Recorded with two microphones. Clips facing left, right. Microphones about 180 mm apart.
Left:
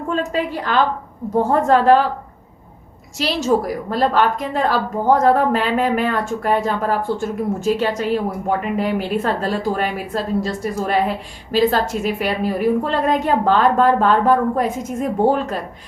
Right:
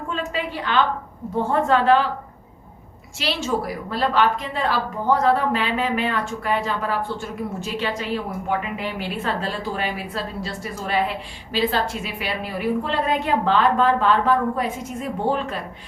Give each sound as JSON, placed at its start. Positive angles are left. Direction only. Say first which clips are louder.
{"t": 0.1, "sound": "a woman's voice", "louder": "left 6 dB", "side_deg": 40}
{"t": 3.2, "sound": "a woman's voice", "louder": "left 6 dB", "side_deg": 40}